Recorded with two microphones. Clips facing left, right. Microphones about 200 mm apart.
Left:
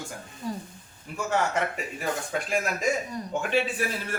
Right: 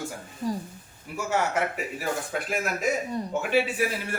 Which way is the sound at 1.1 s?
10° right (ahead or behind).